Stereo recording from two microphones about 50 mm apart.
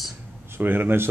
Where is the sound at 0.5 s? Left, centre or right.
Right.